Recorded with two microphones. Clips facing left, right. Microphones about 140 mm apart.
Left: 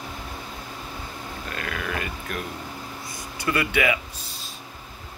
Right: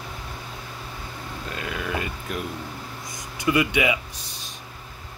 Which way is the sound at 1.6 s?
20° right (ahead or behind).